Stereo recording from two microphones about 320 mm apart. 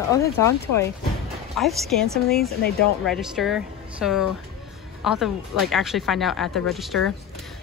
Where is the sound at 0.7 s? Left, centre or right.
Left.